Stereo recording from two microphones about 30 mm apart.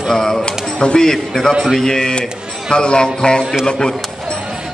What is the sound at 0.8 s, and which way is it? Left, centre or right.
Speech, left.